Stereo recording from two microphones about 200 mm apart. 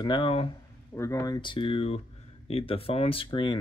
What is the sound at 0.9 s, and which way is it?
Speech, 15° left (ahead or behind).